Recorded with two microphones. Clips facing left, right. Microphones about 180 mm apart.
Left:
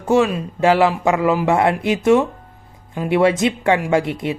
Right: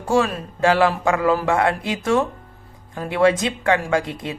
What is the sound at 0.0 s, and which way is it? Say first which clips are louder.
Speech: left 4 dB; 20° left (ahead or behind).